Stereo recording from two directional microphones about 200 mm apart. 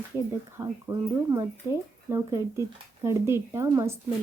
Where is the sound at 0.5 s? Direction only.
15° right (ahead or behind).